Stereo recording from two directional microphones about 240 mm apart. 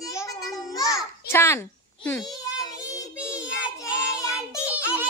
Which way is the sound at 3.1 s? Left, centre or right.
Centre.